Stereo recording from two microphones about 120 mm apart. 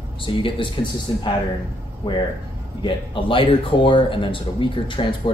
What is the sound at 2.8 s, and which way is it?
Speech, 45° left (ahead or behind).